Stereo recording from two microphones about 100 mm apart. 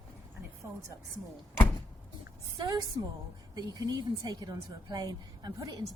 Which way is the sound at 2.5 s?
45° right (ahead or behind).